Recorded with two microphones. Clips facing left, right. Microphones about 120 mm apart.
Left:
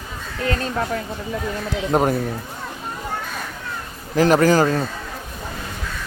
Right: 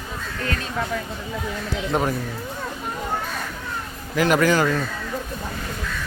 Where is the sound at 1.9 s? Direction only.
45° left (ahead or behind).